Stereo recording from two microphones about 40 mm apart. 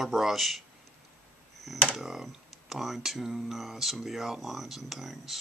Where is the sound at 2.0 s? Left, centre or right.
Centre.